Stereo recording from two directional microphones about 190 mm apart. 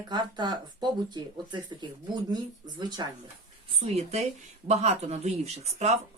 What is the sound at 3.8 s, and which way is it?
Speech, 35° right (ahead or behind).